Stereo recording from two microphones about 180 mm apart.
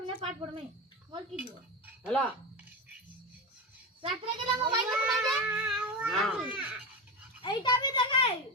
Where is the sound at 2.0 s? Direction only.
10° left (ahead or behind).